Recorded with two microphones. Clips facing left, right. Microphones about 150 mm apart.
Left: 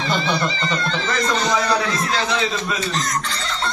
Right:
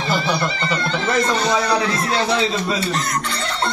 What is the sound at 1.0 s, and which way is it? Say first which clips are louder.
A man's voice: right 4 dB; 25° right (ahead or behind).